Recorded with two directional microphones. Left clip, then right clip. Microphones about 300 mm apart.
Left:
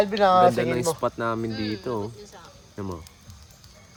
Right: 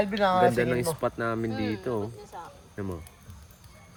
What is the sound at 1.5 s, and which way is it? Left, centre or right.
Speech, centre.